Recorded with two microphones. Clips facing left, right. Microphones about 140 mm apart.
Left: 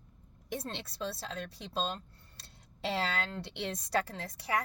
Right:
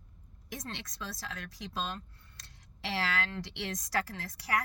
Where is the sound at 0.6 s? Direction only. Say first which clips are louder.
Left 3 dB; 30° left (ahead or behind).